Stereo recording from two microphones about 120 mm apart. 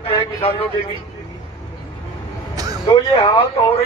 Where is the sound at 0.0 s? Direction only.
50° left (ahead or behind).